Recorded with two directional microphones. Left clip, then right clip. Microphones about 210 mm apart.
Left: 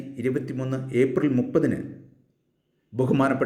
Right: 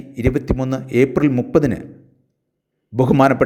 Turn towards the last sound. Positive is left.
turn(degrees=-40)  # may be behind; listen again after turning